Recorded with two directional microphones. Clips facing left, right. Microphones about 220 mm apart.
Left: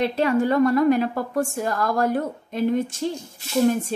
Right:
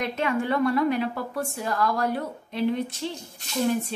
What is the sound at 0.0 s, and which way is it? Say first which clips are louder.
A woman's voice: left 6 dB; 35° left (ahead or behind).